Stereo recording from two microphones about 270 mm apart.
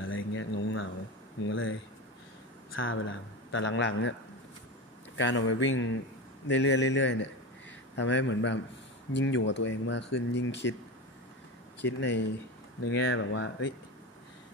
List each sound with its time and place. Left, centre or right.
0.0 s a sound: left
1.5 s speech: left
5.1 s speech: left
11.8 s speech: left